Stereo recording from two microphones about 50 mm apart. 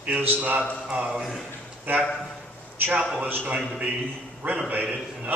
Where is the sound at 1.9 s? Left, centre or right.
Right.